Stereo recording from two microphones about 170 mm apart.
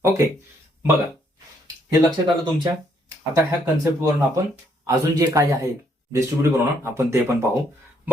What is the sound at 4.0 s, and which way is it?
Speech, 20° right (ahead or behind).